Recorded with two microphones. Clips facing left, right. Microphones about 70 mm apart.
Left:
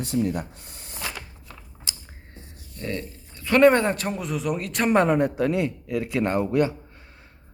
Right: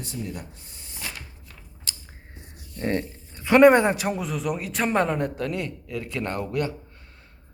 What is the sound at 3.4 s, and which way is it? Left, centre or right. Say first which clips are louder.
Speech: right 2 dB; centre.